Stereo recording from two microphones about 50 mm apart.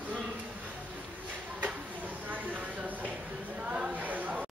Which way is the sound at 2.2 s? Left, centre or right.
Right.